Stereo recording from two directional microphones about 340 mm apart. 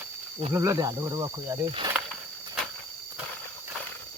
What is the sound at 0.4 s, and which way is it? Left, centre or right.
Speech, centre.